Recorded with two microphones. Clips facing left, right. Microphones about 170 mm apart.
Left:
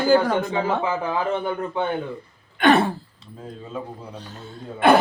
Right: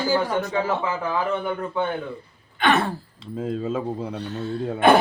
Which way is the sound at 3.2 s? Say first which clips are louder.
Right 11 dB; 90° right.